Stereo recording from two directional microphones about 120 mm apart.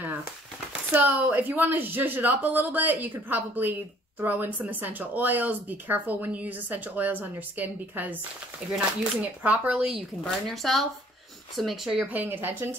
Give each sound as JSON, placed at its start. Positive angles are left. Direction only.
{"t": 0.9, "sound": "speech", "side_deg": -15}
{"t": 12.1, "sound": "speech", "side_deg": -15}